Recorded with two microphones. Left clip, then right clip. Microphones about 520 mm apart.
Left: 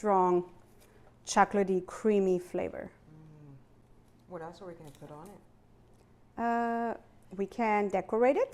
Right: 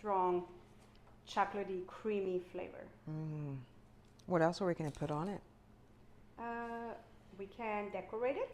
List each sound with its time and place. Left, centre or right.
0.0 s speech: left
4.3 s speech: right
6.3 s a sound: left
7.3 s a woman's voice: left